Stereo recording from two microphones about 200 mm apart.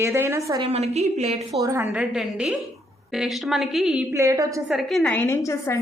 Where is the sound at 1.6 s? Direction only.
15° right (ahead or behind).